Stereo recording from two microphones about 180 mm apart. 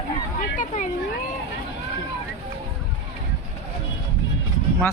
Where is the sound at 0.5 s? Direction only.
45° left (ahead or behind).